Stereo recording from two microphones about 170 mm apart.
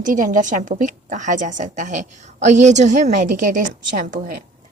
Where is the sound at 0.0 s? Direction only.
50° right (ahead or behind).